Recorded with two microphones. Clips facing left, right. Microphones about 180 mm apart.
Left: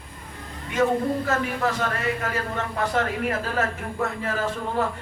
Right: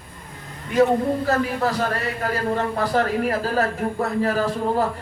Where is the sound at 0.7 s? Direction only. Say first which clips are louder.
Right 4 dB; 35° right (ahead or behind).